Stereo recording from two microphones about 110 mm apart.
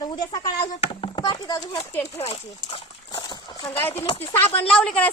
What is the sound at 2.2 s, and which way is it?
Speech, 65° left (ahead or behind).